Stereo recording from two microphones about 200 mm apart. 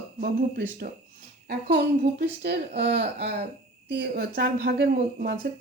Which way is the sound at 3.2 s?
30° right (ahead or behind).